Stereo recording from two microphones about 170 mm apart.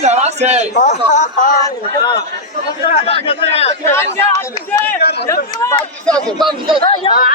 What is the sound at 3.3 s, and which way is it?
Speech, 35° left (ahead or behind).